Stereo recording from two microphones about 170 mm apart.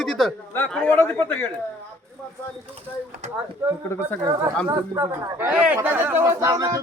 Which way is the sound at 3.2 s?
40° right (ahead or behind).